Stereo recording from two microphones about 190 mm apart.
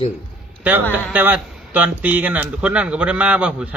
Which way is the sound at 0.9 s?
10° right (ahead or behind).